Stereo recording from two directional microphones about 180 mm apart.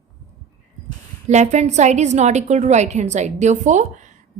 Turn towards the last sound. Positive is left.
turn(degrees=-45)  # may be behind; listen again after turning